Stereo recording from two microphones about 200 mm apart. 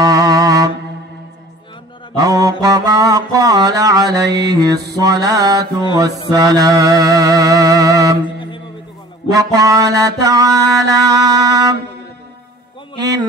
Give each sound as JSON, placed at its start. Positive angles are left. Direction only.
{"t": 0.0, "sound": "music", "side_deg": -15}
{"t": 2.1, "sound": "mantra", "side_deg": -15}
{"t": 9.3, "sound": "mantra", "side_deg": -15}